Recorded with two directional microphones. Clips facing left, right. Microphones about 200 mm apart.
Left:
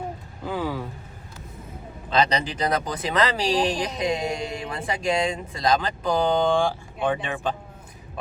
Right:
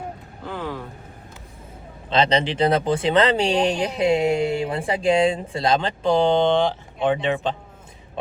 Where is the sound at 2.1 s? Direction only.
25° right (ahead or behind).